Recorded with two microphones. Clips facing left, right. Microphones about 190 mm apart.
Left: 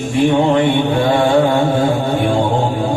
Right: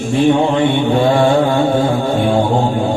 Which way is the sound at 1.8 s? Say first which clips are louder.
Even; 25° left (ahead or behind).